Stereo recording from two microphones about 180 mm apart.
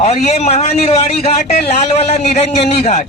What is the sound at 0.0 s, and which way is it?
A man's voice, 35° left (ahead or behind).